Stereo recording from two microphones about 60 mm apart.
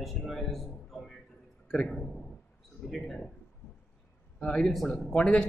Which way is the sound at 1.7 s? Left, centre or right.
Centre.